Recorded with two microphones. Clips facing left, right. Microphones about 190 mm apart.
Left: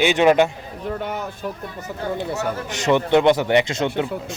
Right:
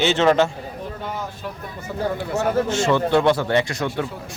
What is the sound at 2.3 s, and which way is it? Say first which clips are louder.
Speech: right 5 dB; 15° left (ahead or behind).